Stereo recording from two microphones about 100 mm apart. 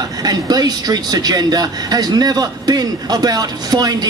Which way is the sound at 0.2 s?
40° right (ahead or behind).